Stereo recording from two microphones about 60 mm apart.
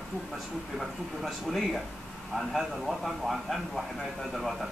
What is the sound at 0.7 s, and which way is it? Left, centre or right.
A man's voice, centre.